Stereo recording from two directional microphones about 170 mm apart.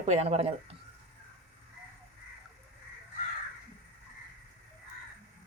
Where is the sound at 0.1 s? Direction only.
40° right (ahead or behind).